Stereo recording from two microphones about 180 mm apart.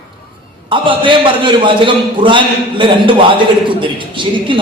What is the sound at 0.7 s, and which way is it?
A man's voice, 25° right (ahead or behind).